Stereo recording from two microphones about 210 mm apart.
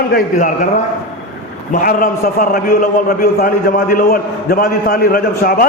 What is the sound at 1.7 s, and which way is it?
A man's voice, 40° left (ahead or behind).